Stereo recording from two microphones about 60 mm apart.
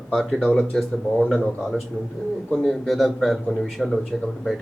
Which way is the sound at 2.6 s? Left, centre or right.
Centre.